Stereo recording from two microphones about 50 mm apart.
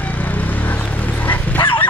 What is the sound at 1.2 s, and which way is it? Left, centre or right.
Dog, left.